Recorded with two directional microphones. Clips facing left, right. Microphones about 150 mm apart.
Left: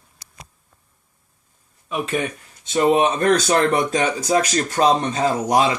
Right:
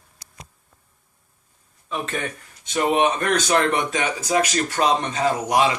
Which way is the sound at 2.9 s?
35° left (ahead or behind).